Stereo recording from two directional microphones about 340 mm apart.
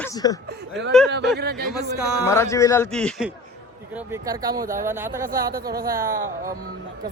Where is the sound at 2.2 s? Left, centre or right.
Centre.